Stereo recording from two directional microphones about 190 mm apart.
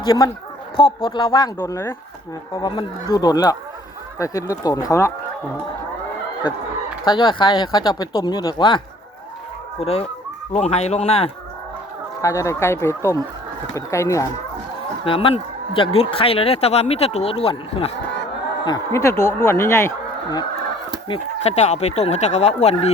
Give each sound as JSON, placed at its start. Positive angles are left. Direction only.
{"t": 0.0, "sound": "speech", "side_deg": 20}
{"t": 7.0, "sound": "speech", "side_deg": 20}
{"t": 9.8, "sound": "speech", "side_deg": 30}
{"t": 12.2, "sound": "speech", "side_deg": 15}
{"t": 15.0, "sound": "speech", "side_deg": 25}
{"t": 18.6, "sound": "speech", "side_deg": 20}
{"t": 21.1, "sound": "speech", "side_deg": 35}